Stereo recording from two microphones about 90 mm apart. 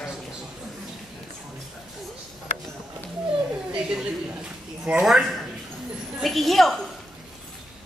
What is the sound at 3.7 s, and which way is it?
A man's voice, 10° right (ahead or behind).